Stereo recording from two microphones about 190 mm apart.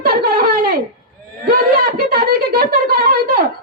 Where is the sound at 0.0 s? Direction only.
55° right (ahead or behind).